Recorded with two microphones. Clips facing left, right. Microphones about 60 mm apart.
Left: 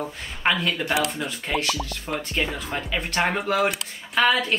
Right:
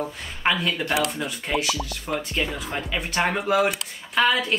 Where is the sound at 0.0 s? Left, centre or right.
Centre.